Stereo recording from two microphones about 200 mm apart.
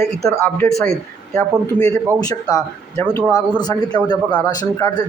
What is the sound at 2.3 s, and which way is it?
Speech, 15° left (ahead or behind).